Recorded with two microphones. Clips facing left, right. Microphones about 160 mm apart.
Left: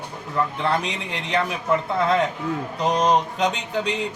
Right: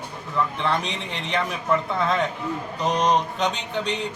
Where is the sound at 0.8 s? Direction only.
5° left (ahead or behind).